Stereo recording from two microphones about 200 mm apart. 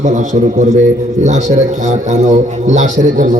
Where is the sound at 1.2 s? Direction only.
35° right (ahead or behind).